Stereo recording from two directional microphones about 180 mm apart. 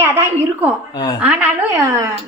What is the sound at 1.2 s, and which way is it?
Speech, 10° right (ahead or behind).